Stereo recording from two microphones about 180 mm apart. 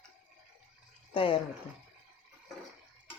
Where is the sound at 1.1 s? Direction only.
30° left (ahead or behind).